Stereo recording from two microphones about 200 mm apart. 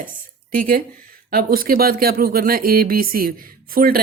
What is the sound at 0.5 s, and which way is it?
Speech, 45° right (ahead or behind).